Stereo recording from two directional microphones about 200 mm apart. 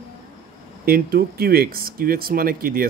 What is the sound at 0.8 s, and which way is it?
Speech, 50° right (ahead or behind).